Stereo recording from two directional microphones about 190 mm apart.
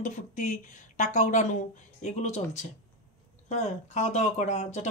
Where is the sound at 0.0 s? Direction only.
40° left (ahead or behind).